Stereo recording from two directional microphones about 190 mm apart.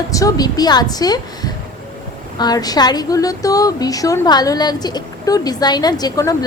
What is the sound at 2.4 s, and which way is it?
A woman's voice, 20° left (ahead or behind).